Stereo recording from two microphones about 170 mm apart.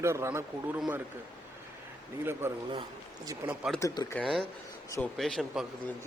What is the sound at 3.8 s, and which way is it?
Speech, 20° left (ahead or behind).